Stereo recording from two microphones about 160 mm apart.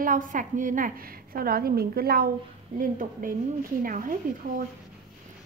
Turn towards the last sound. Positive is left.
turn(degrees=-55)  # may be behind; listen again after turning